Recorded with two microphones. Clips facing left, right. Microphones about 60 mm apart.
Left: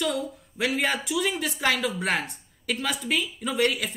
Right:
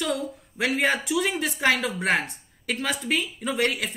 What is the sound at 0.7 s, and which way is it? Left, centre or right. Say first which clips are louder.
Speech: right 4 dB; centre.